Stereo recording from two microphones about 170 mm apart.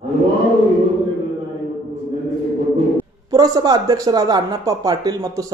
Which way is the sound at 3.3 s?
20° right (ahead or behind).